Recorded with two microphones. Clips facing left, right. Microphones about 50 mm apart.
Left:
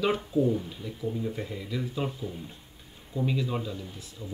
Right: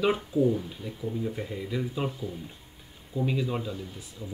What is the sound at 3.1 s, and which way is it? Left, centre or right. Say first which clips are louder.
Speech: right 1 dB; centre.